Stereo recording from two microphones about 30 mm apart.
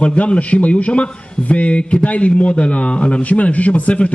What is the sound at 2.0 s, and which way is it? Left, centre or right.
A man's voice, left.